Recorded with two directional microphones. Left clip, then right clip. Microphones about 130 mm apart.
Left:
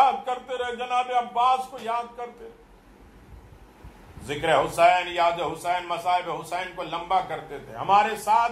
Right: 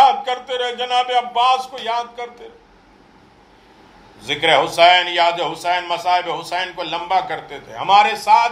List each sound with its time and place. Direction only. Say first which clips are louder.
0.2 s a man's voice: right 7 dB; 25° right (ahead or behind)
4.3 s a man's voice: right 7 dB; 20° right (ahead or behind)